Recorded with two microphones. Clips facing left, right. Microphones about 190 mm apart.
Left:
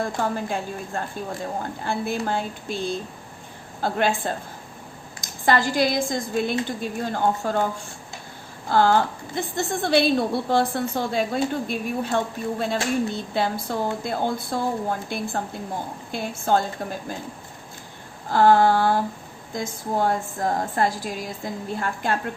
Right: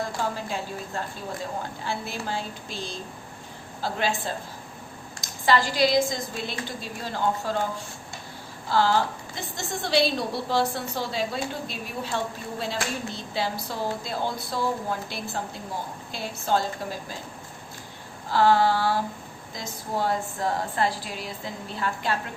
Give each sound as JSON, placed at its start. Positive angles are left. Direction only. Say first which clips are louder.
{"t": 0.2, "sound": "speech", "louder": "left 4 dB", "side_deg": 55}
{"t": 8.7, "sound": "speech", "louder": "left 4 dB", "side_deg": 50}
{"t": 18.3, "sound": "speech", "louder": "left 4 dB", "side_deg": 50}